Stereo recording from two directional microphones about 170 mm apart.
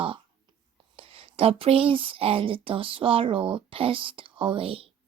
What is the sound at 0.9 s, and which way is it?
Speech, 35° right (ahead or behind).